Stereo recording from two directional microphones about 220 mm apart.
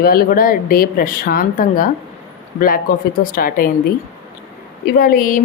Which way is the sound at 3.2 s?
40° left (ahead or behind).